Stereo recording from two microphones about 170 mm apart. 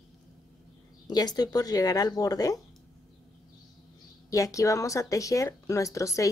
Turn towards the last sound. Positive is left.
turn(degrees=20)  # may be behind; listen again after turning